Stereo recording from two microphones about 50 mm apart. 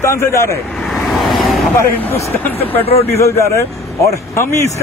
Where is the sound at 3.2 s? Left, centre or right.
Left.